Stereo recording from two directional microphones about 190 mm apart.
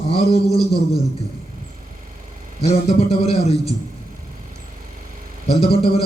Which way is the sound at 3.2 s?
35° left (ahead or behind).